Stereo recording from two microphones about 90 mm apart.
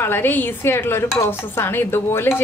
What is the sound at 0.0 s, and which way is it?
Speech, 25° left (ahead or behind).